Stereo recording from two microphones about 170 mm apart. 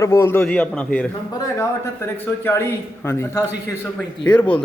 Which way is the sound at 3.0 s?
15° left (ahead or behind).